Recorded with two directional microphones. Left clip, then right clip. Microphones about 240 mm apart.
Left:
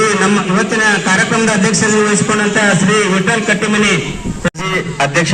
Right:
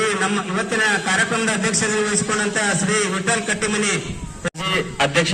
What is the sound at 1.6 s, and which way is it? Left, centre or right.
A man's voice, right.